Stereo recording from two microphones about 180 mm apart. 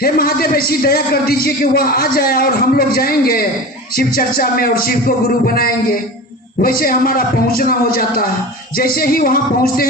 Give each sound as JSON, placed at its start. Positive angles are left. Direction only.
{"t": 0.0, "sound": "speech", "side_deg": 55}